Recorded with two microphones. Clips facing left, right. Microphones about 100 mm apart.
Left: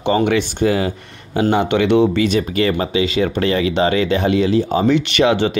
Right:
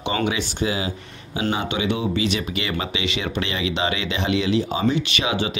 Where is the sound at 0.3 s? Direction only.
55° left (ahead or behind).